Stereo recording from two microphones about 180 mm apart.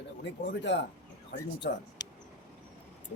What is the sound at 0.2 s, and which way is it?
Speech, 80° left.